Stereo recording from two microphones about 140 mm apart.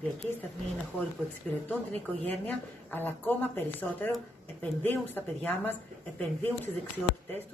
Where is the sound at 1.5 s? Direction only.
5° left (ahead or behind).